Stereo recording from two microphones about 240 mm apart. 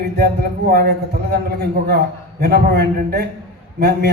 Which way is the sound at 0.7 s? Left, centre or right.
Right.